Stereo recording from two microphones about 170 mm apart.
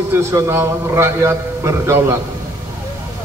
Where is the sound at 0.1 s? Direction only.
15° right (ahead or behind).